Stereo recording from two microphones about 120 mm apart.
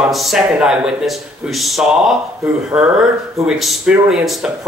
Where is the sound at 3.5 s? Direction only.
5° right (ahead or behind).